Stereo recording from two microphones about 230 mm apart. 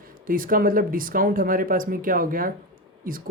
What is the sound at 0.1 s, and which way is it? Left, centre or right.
Speech, right.